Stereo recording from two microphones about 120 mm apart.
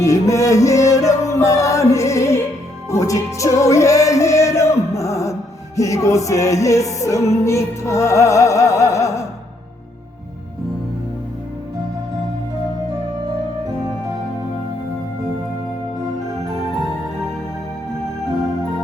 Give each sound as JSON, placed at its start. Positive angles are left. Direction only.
{"t": 0.0, "sound": "music", "side_deg": 25}